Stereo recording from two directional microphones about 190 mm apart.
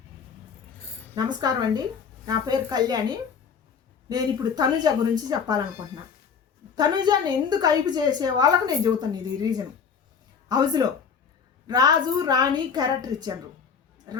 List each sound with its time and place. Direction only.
1.1 s a woman's voice: 20° right (ahead or behind)
6.7 s a woman's voice: 20° right (ahead or behind)